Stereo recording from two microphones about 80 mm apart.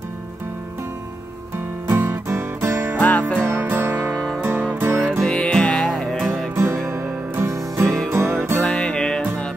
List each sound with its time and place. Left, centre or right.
1.9 s music: right
3.0 s music: centre
3.3 s music: right
5.2 s music: centre
6.5 s music: right
8.5 s music: centre